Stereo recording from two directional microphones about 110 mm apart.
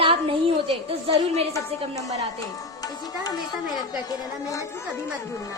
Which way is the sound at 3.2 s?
35° left (ahead or behind).